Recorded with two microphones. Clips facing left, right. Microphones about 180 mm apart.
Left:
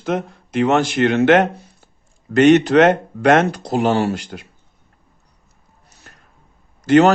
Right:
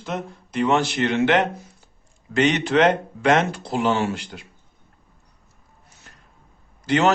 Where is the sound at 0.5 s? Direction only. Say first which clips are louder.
Left 4 dB; 70° left (ahead or behind).